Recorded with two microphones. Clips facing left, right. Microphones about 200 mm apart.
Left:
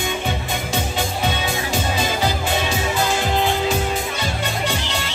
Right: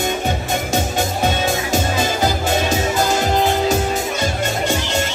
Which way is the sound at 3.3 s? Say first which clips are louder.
Right 3 dB; 45° right (ahead or behind).